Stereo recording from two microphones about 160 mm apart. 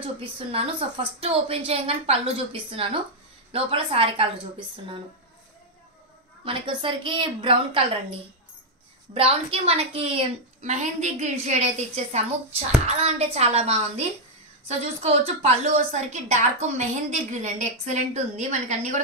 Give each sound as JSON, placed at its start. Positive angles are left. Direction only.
{"t": 0.0, "sound": "a woman's voice", "side_deg": -35}
{"t": 6.4, "sound": "a woman's voice", "side_deg": -35}